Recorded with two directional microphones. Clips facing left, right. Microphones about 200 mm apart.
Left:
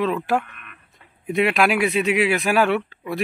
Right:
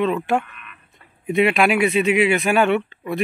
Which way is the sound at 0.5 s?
50° left (ahead or behind).